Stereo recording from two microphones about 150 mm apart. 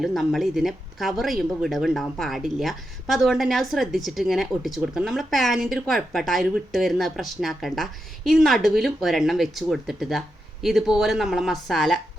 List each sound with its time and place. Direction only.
0.0 s speech: centre (ahead or behind)